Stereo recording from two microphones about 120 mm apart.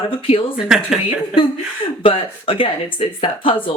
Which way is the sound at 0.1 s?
50° left (ahead or behind).